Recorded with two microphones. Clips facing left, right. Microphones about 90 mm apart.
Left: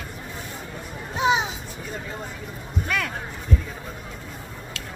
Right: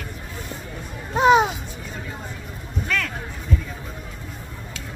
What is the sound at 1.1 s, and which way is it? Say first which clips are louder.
Music: right 7 dB; 50° right (ahead or behind).